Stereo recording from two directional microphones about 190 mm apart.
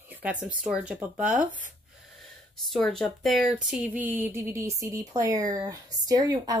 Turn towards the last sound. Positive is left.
turn(degrees=-20)  # may be behind; listen again after turning